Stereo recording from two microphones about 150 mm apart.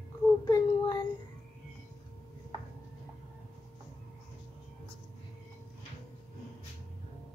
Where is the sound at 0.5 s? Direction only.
30° left (ahead or behind).